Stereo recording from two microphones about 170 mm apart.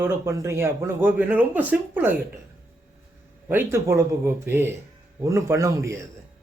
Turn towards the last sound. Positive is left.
turn(degrees=-20)  # may be behind; listen again after turning